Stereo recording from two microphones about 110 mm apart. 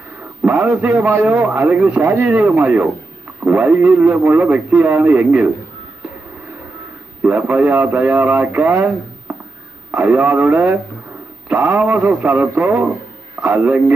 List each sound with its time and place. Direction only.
0.4 s a man's voice: 15° right (ahead or behind)
7.2 s a man's voice: 15° right (ahead or behind)
9.3 s a sound: 20° right (ahead or behind)
9.8 s a man's voice: 15° right (ahead or behind)